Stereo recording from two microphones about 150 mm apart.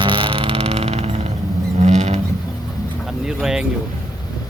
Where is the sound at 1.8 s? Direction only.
50° right (ahead or behind).